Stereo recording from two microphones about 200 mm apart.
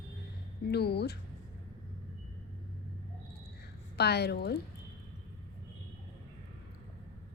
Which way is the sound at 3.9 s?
55° left (ahead or behind).